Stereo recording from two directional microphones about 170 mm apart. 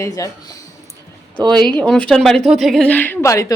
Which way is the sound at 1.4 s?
5° left (ahead or behind).